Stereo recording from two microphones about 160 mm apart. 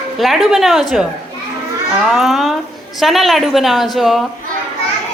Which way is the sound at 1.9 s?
Centre (ahead or behind).